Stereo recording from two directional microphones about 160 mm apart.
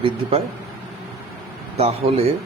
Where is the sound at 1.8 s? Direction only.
40° right (ahead or behind).